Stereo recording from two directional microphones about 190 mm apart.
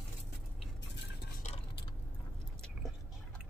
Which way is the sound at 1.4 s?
40° left (ahead or behind).